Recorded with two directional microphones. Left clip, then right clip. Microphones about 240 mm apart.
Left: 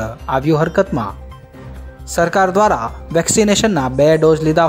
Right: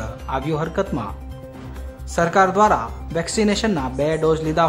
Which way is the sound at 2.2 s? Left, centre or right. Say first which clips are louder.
Left 3 dB; left.